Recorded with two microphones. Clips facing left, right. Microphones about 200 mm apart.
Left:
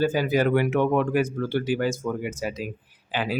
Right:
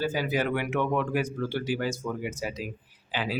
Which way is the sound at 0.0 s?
50° left (ahead or behind).